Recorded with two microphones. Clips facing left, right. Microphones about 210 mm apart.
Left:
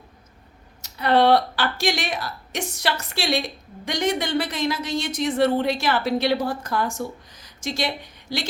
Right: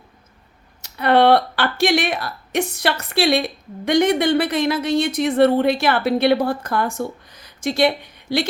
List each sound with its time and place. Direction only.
0.8 s speech: 60° right (ahead or behind)